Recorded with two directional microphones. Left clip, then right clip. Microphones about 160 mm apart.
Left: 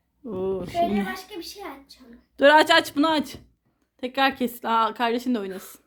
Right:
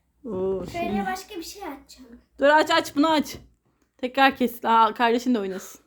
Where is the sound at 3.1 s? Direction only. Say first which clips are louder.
Right 1 dB; 10° right (ahead or behind).